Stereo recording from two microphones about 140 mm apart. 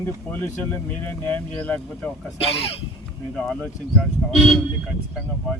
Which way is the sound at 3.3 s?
5° left (ahead or behind).